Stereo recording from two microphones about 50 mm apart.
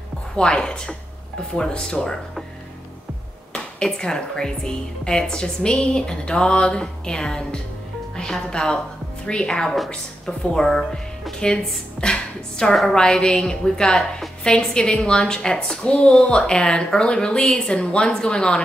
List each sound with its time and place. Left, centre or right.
0.4 s a woman's voice: centre
3.8 s a woman's voice: centre